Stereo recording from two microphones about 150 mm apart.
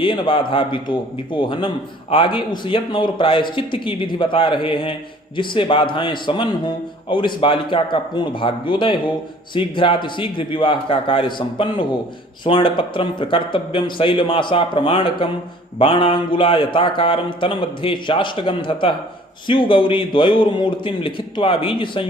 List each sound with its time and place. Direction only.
0.0 s a man's voice: 35° left (ahead or behind)